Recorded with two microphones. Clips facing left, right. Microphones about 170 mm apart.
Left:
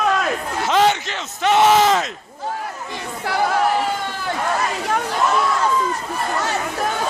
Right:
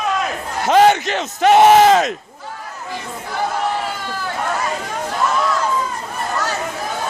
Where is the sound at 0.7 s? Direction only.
50° right (ahead or behind).